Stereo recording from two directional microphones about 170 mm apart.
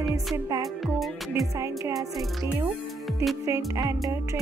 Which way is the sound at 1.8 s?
20° right (ahead or behind).